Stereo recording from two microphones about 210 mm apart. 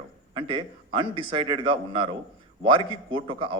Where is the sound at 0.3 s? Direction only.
25° right (ahead or behind).